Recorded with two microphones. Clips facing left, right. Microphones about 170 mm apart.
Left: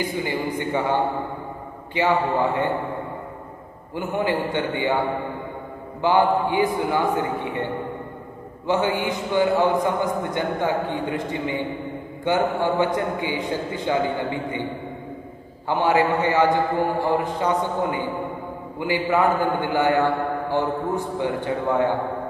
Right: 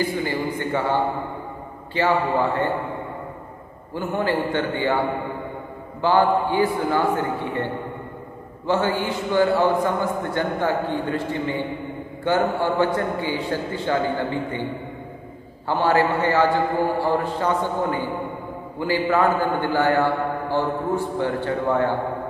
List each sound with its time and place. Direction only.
0.0 s a man's voice: 15° left (ahead or behind)
3.9 s a man's voice: 15° left (ahead or behind)
5.9 s a man's voice: 15° left (ahead or behind)
8.6 s a man's voice: 15° left (ahead or behind)
15.7 s a man's voice: 15° left (ahead or behind)